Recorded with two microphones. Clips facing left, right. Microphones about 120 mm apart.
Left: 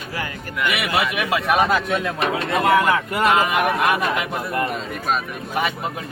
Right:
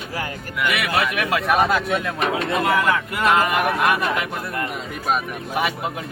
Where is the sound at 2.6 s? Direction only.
25° left (ahead or behind).